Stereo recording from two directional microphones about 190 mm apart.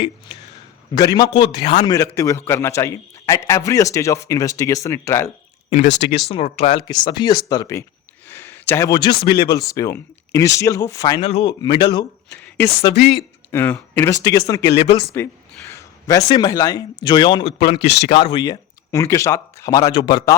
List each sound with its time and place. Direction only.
0.9 s a man's voice: 20° left (ahead or behind)
6.1 s speech: 30° left (ahead or behind)
6.8 s a man's voice: 20° left (ahead or behind)
11.3 s speech: 35° left (ahead or behind)
11.6 s a man's voice: 20° left (ahead or behind)
13.5 s a man's voice: 10° left (ahead or behind)
14.8 s speech: 30° left (ahead or behind)
15.7 s a man's voice: 15° left (ahead or behind)
17.7 s speech: 60° left (ahead or behind)
18.1 s a man's voice: 25° left (ahead or behind)